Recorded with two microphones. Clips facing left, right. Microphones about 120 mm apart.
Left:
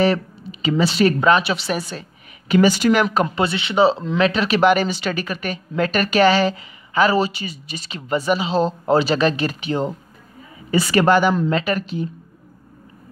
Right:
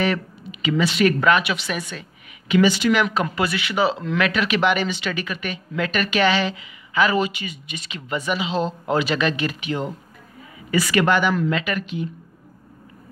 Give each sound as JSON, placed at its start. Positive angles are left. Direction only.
{"t": 0.0, "sound": "speech", "side_deg": 35}
{"t": 3.3, "sound": "speech", "side_deg": 25}